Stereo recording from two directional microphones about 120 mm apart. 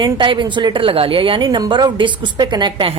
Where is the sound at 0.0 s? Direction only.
40° right (ahead or behind).